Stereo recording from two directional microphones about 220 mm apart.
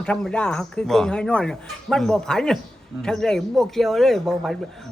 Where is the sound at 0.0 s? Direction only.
5° left (ahead or behind).